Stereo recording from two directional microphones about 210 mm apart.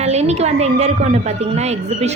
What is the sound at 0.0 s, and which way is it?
A woman's voice, 30° right (ahead or behind).